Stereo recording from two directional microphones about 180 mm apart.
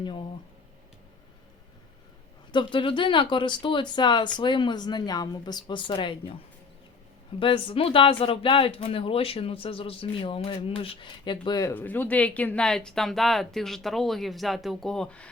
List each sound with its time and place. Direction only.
2.5 s speech: 25° left (ahead or behind)
7.3 s speech: 30° left (ahead or behind)
11.7 s speech: 10° left (ahead or behind)